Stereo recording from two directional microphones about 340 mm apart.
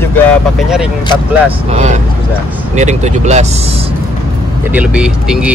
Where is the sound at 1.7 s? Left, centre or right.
Centre.